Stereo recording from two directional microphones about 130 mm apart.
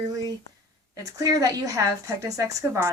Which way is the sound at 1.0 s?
30° right (ahead or behind).